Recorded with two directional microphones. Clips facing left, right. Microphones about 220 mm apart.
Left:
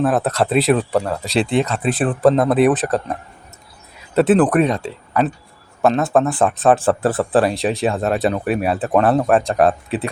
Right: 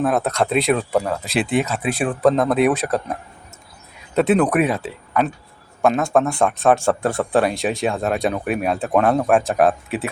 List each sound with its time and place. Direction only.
0.0 s speech: 5° left (ahead or behind)
4.1 s speech: 5° left (ahead or behind)